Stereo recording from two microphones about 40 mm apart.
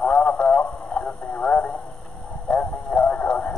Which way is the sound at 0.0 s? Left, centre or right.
Left.